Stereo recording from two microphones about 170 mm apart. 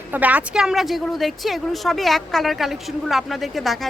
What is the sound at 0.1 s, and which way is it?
A woman's voice, 10° right (ahead or behind).